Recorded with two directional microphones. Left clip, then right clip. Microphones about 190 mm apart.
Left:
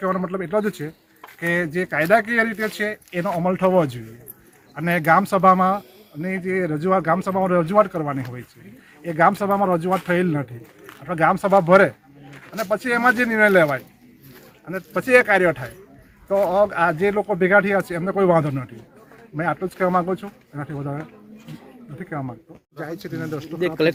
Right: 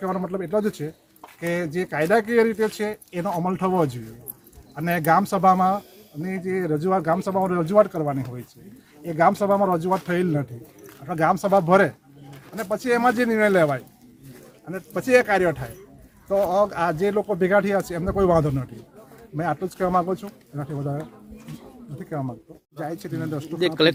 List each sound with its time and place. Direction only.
0.0 s speech: 5° left (ahead or behind); by 22.3 s 15° right (ahead or behind)
22.8 s speech: 70° right (ahead or behind)
23.6 s speech: centre (ahead or behind)